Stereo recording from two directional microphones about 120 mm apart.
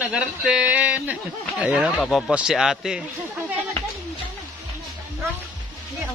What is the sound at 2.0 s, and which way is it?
Speech, centre (ahead or behind).